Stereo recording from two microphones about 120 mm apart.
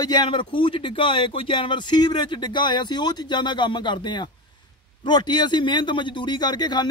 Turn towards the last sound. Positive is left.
turn(degrees=35)  # may be behind; listen again after turning